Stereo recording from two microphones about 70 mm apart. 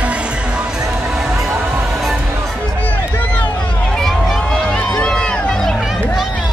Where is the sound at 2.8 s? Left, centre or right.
Left.